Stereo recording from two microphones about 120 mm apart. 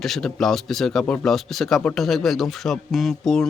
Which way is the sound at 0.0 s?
5° left (ahead or behind).